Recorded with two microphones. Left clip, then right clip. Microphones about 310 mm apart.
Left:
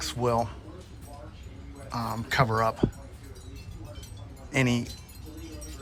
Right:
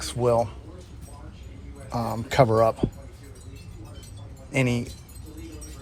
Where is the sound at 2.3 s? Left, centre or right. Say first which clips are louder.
Right 6 dB; centre.